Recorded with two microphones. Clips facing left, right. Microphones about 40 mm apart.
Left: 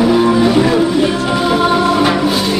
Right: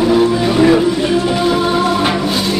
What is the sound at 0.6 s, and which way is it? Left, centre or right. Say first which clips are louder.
Music: right 1 dB; centre.